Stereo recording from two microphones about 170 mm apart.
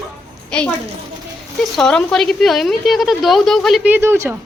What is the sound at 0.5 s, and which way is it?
Speech, 5° left (ahead or behind).